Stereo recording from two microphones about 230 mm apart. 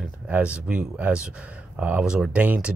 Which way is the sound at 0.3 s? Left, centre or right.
Centre.